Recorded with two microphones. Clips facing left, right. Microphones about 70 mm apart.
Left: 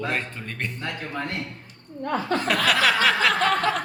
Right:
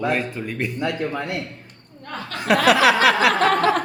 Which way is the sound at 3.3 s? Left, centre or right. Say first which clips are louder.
Right 4 dB; right.